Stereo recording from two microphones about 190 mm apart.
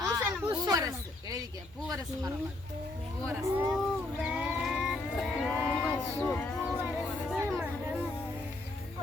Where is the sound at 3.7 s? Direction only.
5° right (ahead or behind).